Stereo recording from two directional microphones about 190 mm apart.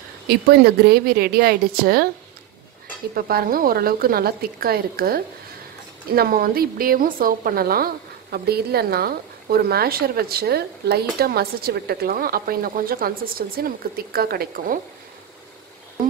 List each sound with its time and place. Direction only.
0.3 s a woman's voice: 55° right (ahead or behind)
3.2 s a woman's voice: 50° right (ahead or behind)